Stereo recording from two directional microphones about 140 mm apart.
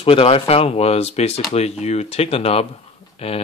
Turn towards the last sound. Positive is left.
turn(degrees=45)  # may be behind; listen again after turning